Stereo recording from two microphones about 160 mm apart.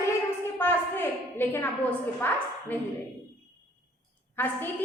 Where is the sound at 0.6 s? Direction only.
10° left (ahead or behind).